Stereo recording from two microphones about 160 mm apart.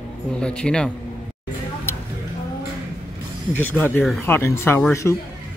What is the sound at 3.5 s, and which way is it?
Speech, 10° left (ahead or behind).